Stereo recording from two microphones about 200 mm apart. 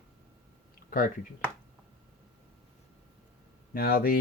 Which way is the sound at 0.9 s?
45° left (ahead or behind).